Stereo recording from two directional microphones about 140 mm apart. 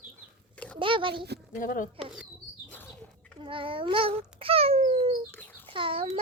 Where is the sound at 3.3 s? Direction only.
40° right (ahead or behind).